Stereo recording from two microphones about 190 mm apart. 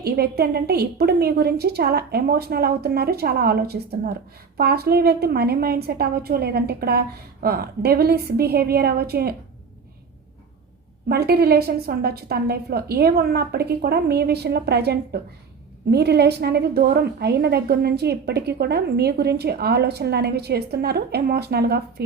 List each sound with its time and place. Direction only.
0.0 s a woman's voice: 55° right (ahead or behind)
11.1 s a woman's voice: 55° right (ahead or behind)